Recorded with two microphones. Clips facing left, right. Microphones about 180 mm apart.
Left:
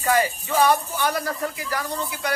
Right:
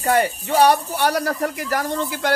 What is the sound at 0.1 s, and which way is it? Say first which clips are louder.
Speech: right 3 dB; 65° right (ahead or behind).